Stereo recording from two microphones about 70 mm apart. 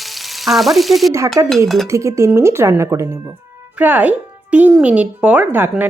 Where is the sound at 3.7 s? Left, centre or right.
Right.